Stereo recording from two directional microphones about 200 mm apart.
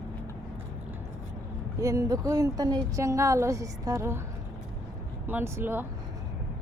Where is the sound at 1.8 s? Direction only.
15° right (ahead or behind).